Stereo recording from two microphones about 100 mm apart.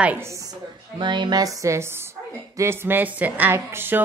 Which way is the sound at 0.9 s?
50° right (ahead or behind).